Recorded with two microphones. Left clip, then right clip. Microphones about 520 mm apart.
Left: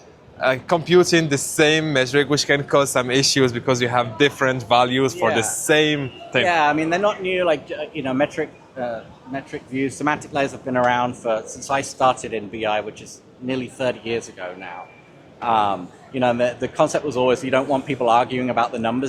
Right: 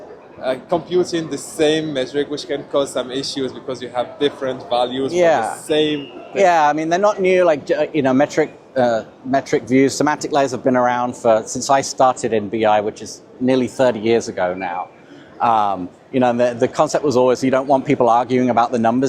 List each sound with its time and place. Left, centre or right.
0.4 s speech: left
5.6 s a man's voice: left
6.4 s speech: right